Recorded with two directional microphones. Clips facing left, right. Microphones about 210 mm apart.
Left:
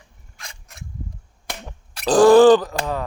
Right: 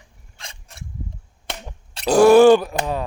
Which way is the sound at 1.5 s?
30° right (ahead or behind).